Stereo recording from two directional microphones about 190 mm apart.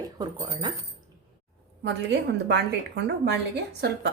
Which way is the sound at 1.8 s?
65° right (ahead or behind).